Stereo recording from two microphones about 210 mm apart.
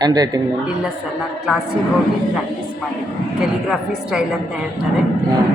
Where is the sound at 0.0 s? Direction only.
20° right (ahead or behind).